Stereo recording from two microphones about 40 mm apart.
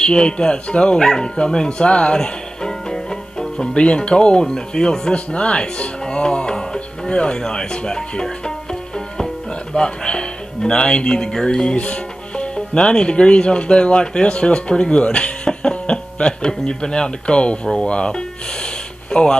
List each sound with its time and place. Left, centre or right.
0.0 s speech: left
1.0 s music: centre
3.7 s speech: left
5.1 s speech: left
11.7 s speech: left